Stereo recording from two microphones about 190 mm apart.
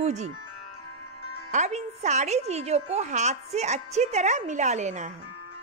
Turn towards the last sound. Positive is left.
turn(degrees=-40)  # may be behind; listen again after turning